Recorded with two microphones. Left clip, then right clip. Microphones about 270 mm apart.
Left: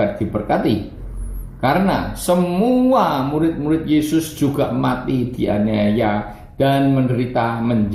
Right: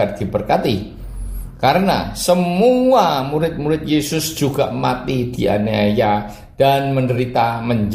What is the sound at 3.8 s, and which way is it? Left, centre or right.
Speech, right.